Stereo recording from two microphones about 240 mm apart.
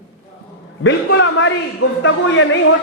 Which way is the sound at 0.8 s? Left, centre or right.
Left.